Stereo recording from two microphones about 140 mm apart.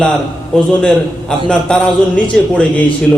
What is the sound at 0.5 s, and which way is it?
A man's voice, 5° left (ahead or behind).